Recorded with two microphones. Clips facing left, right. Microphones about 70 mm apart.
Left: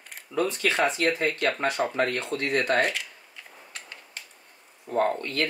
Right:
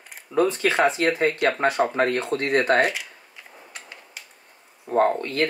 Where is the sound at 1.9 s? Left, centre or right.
Right.